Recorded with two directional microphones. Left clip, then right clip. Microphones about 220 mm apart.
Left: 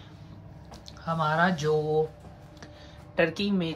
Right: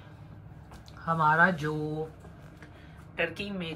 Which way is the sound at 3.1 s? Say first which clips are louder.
Left 6 dB; 15° left (ahead or behind).